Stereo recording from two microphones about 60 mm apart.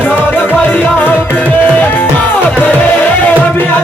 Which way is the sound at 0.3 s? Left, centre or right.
Left.